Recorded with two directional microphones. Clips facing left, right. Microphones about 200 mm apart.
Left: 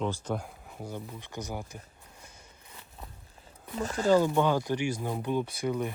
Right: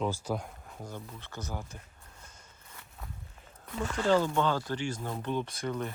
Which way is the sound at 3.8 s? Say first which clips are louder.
Left 2 dB; 40° left (ahead or behind).